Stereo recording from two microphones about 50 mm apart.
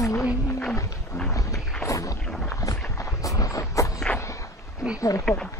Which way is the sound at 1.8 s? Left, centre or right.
Left.